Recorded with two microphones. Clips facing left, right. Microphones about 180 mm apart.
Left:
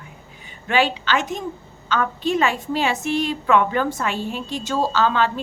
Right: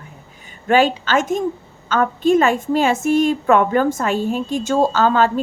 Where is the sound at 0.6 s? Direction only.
45° right (ahead or behind).